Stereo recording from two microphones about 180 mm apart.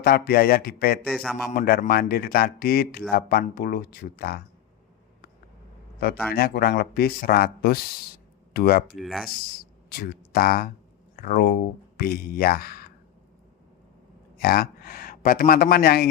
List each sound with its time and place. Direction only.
0.0 s speech: 55° left (ahead or behind)
1.0 s a man's voice: 5° left (ahead or behind)
1.5 s speech: 55° left (ahead or behind)
6.3 s speech: 60° left (ahead or behind)
9.0 s a man's voice: centre (ahead or behind)
9.6 s speech: 55° left (ahead or behind)
14.3 s a man's voice: 55° left (ahead or behind)